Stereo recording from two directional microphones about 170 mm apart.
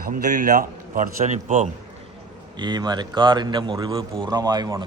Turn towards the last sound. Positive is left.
turn(degrees=-25)  # may be behind; listen again after turning